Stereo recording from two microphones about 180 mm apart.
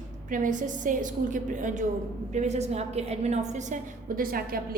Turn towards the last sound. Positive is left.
turn(degrees=-55)  # may be behind; listen again after turning